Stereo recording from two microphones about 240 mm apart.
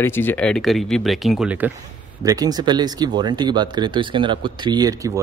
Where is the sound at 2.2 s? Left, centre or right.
Centre.